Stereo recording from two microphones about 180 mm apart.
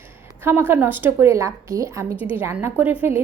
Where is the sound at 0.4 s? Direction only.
10° right (ahead or behind).